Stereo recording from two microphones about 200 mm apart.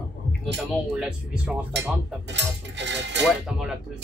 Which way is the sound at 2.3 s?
60° right (ahead or behind).